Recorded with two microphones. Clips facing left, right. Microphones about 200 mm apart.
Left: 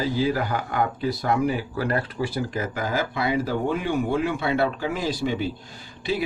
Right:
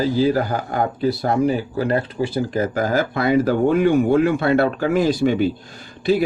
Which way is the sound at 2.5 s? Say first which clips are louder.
Right 7 dB; 40° right (ahead or behind).